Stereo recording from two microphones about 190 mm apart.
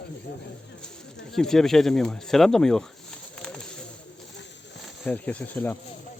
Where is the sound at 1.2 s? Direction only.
Centre (ahead or behind).